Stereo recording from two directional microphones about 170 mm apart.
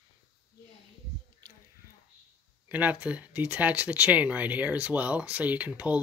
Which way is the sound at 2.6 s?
10° right (ahead or behind).